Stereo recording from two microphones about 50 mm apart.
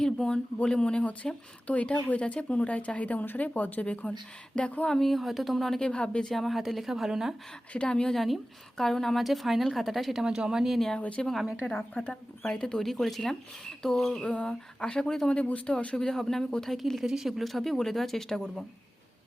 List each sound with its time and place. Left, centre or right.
0.0 s speech: centre
1.6 s speech: left
4.9 s speech: centre
5.8 s speech: centre
6.3 s speech: centre
7.9 s speech: centre
10.2 s speech: centre
10.8 s speech: centre
11.0 s speech: left
11.6 s a woman's voice: left
12.4 s speech: centre
15.4 s speech: left
16.0 s speech: centre
17.0 s speech: centre